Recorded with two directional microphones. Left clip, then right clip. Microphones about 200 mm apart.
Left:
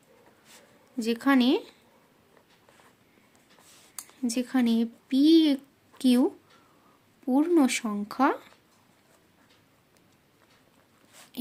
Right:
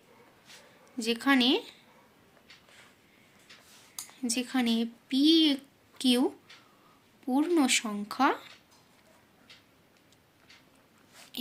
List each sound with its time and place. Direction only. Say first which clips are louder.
0.9 s speech: left 2 dB; 50° left (ahead or behind)
4.2 s speech: left 3 dB; 50° left (ahead or behind)